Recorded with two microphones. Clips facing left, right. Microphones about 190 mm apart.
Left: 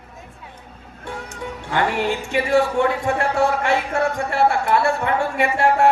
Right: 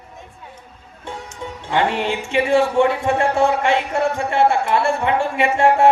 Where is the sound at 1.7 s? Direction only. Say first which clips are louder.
Right 1 dB; 25° right (ahead or behind).